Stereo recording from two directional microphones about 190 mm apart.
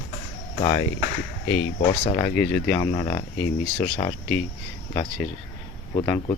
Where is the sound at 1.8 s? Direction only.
30° left (ahead or behind).